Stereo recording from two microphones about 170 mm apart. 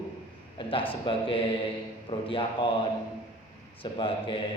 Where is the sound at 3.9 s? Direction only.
30° left (ahead or behind).